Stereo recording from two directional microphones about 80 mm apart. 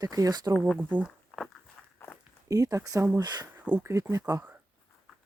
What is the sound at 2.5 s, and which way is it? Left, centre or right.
Speech, right.